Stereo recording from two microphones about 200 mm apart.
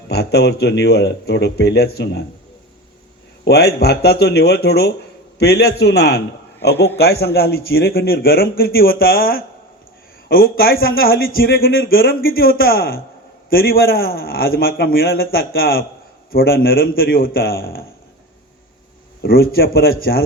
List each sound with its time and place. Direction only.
0.1 s a man's voice: 55° left (ahead or behind)
3.4 s a man's voice: 55° left (ahead or behind)
19.2 s a man's voice: 50° left (ahead or behind)